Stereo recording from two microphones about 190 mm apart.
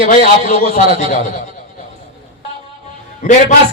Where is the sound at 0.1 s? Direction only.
45° left (ahead or behind).